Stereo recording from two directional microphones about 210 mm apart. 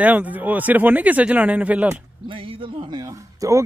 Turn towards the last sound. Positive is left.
turn(degrees=-15)  # may be behind; listen again after turning